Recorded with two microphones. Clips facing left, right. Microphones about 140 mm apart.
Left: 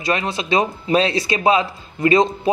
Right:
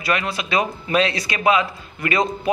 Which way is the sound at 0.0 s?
25° left (ahead or behind).